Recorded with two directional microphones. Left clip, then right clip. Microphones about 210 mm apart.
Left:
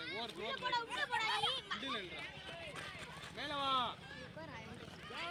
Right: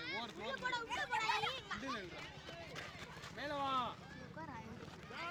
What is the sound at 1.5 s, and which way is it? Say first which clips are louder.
Children playing: left 4 dB; 30° right (ahead or behind).